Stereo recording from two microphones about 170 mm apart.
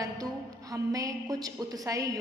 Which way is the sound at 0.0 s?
20° right (ahead or behind).